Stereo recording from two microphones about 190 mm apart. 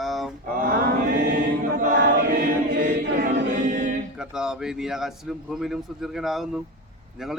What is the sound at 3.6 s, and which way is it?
Music, 40° right (ahead or behind).